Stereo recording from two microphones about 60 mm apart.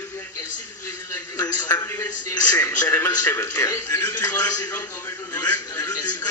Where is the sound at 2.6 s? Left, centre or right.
Left.